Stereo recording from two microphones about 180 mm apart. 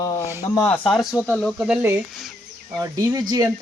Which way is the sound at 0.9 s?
Centre (ahead or behind).